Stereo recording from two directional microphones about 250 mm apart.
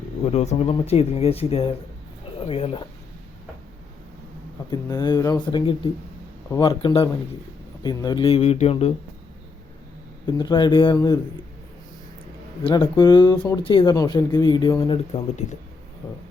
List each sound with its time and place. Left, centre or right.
0.3 s speech: left
4.7 s speech: centre
10.2 s speech: centre
12.6 s speech: centre